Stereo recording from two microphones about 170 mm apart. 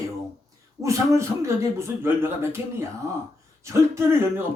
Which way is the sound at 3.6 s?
15° right (ahead or behind).